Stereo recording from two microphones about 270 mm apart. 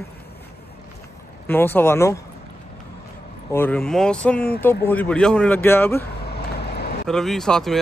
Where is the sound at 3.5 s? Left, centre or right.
Centre.